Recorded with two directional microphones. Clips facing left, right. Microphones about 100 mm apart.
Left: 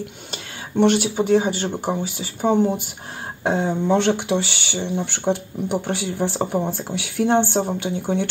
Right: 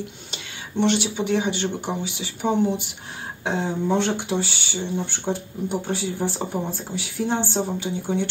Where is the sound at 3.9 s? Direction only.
75° left (ahead or behind); by 8.3 s 60° left (ahead or behind).